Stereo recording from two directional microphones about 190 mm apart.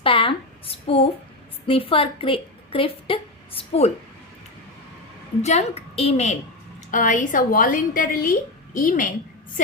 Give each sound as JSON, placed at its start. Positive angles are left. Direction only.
{"t": 0.0, "sound": "a sound", "side_deg": 25}
{"t": 1.6, "sound": "a woman's voice", "side_deg": 30}
{"t": 5.4, "sound": "a woman's voice", "side_deg": 35}